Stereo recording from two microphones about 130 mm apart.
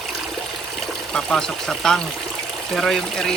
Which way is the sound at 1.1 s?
5° left (ahead or behind).